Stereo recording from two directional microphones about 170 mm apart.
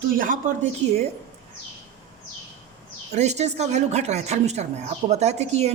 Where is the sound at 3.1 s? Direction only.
40° right (ahead or behind).